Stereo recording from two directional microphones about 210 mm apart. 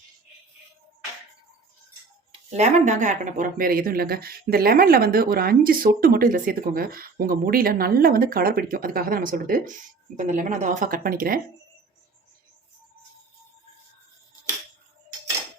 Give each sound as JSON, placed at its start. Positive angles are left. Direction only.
{"t": 2.3, "sound": "a woman's voice", "side_deg": -35}